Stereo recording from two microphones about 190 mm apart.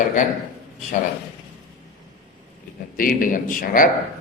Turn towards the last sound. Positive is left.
turn(degrees=45)  # may be behind; listen again after turning